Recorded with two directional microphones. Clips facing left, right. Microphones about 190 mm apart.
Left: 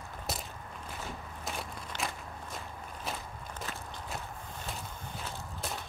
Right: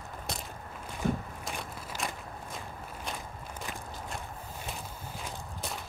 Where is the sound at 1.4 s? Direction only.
Centre (ahead or behind).